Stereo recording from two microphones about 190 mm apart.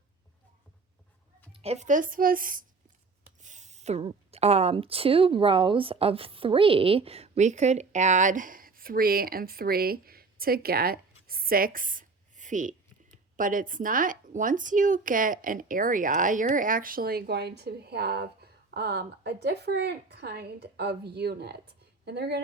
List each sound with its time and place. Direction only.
1.6 s a woman's voice: 35° right (ahead or behind); by 22.4 s 60° right (ahead or behind)